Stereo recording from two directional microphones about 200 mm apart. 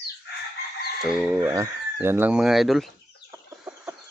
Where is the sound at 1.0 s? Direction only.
5° right (ahead or behind).